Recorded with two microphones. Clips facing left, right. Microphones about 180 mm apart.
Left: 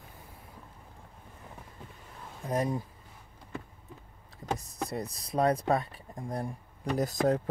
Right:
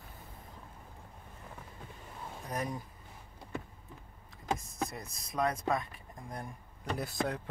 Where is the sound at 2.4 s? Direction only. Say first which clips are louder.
Left 7 dB; 25° left (ahead or behind).